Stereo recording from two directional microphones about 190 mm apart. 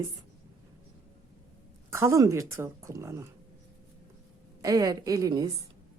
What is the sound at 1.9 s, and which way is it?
Speech, 15° right (ahead or behind).